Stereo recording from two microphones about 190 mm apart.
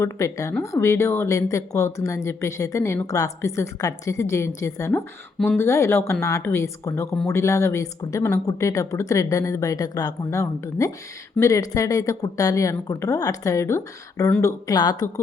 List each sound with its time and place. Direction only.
0.0 s speech: 15° left (ahead or behind)